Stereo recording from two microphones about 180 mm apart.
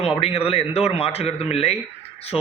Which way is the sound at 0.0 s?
30° left (ahead or behind).